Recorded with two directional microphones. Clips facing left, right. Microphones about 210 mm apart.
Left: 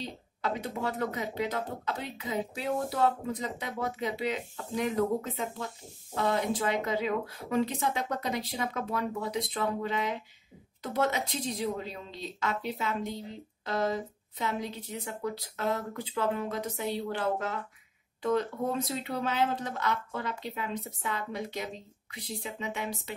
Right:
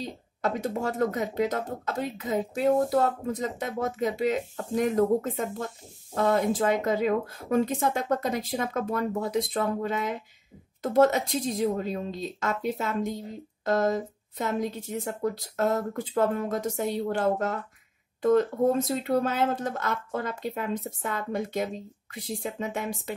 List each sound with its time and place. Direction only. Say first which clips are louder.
0.4 s speech: right 5 dB; 45° right (ahead or behind)